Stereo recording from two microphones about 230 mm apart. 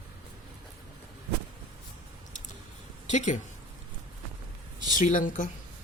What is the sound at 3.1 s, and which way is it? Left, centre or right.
Speech, left.